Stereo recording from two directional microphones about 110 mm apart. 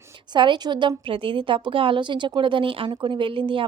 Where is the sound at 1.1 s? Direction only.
50° right (ahead or behind).